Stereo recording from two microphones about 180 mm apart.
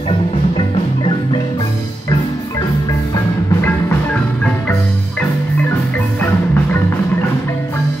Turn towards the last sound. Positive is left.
turn(degrees=10)  # may be behind; listen again after turning